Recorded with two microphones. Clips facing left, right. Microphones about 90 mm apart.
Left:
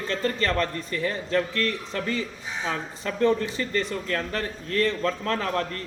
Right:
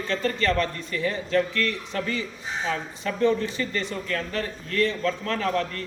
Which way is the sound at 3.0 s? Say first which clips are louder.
Even; 40° left (ahead or behind).